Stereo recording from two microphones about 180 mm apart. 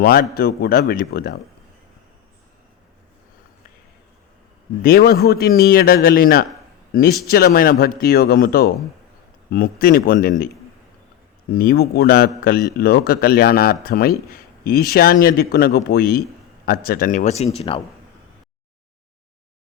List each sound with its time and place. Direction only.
0.0 s a man's voice: 55° left (ahead or behind)
4.8 s a man's voice: 55° left (ahead or behind)
11.5 s a man's voice: 55° left (ahead or behind); by 17.7 s 35° left (ahead or behind)